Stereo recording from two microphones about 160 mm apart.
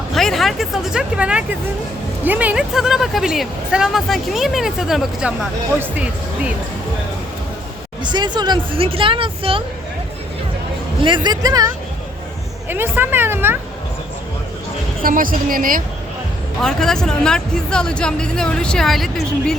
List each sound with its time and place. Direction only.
0.1 s a woman's voice: centre (ahead or behind)
8.0 s speech: 25° right (ahead or behind)
11.0 s speech: 30° right (ahead or behind)
12.6 s a woman's voice: 10° right (ahead or behind)
15.0 s a woman's voice: 60° right (ahead or behind)
16.6 s speech: 5° left (ahead or behind)